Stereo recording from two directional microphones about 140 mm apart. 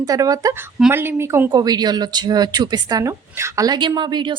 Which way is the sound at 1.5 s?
30° right (ahead or behind).